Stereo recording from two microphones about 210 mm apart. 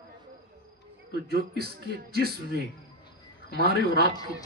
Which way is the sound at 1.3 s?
50° right (ahead or behind).